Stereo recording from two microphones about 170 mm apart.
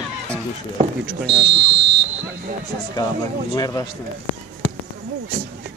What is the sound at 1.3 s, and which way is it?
Speech, 30° right (ahead or behind).